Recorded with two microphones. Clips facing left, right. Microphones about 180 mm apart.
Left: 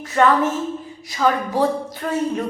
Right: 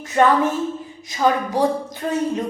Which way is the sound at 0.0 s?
20° right (ahead or behind).